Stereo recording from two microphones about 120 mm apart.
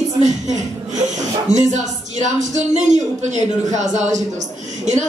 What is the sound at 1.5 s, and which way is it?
A man's voice, 85° right.